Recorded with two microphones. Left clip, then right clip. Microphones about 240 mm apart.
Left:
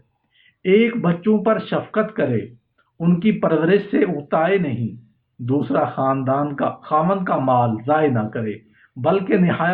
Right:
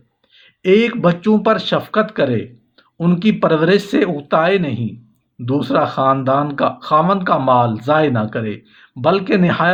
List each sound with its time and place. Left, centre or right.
0.6 s speech: right